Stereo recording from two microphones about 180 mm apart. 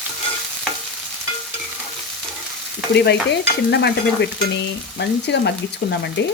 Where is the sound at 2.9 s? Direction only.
70° left (ahead or behind).